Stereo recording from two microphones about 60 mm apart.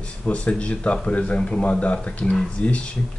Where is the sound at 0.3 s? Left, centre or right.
Centre.